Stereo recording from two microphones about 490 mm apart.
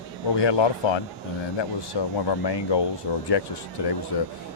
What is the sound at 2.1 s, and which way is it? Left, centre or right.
Speech, left.